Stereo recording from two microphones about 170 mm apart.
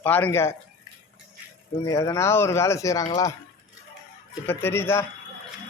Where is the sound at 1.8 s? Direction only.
20° left (ahead or behind).